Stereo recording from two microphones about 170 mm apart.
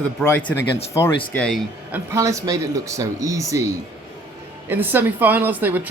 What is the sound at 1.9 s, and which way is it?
Speech, 20° right (ahead or behind).